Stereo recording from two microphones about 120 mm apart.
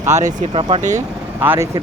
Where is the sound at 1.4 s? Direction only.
15° right (ahead or behind).